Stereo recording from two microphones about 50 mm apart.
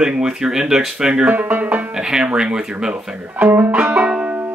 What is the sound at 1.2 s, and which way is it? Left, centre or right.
Speech, right.